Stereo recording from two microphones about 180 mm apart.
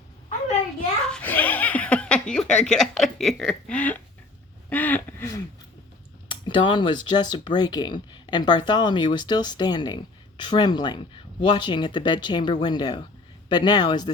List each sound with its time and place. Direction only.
1.0 s speech: 5° left (ahead or behind)
4.7 s a sound: 10° left (ahead or behind)
6.5 s speech: 25° left (ahead or behind)